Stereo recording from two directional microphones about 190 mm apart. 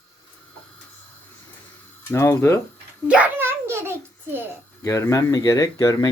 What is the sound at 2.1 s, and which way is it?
Speech, 15° left (ahead or behind).